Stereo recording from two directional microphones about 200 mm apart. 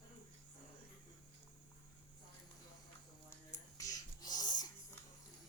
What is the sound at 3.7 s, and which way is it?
Wheeze, 20° left (ahead or behind).